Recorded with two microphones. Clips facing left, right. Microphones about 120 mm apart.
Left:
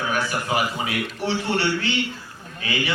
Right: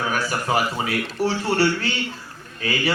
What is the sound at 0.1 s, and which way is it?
A man's voice, 40° right (ahead or behind).